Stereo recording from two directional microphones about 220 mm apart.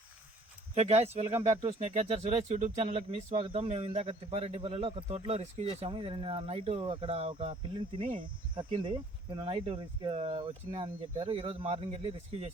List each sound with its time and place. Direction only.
0.7 s speech: 30° right (ahead or behind)